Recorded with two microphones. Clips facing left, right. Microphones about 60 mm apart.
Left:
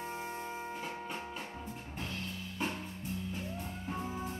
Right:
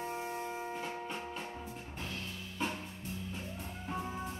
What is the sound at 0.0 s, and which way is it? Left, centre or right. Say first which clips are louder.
Music: right 2 dB; centre.